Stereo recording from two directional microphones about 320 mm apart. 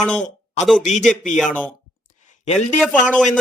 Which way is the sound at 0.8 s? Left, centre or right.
Left.